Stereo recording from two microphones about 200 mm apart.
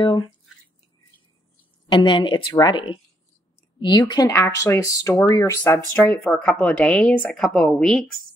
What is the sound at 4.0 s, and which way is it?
Speech, 15° left (ahead or behind).